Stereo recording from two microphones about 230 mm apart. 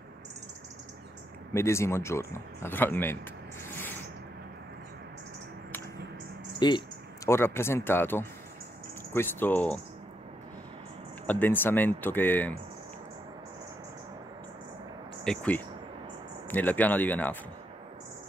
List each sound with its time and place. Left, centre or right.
1.5 s speech: centre
6.6 s speech: centre
11.2 s speech: centre
15.2 s speech: centre